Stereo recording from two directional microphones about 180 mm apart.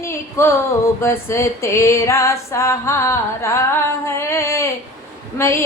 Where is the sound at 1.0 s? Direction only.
15° left (ahead or behind).